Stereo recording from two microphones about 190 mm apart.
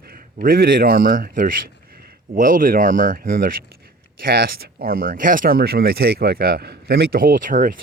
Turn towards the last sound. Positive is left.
turn(degrees=-45)  # may be behind; listen again after turning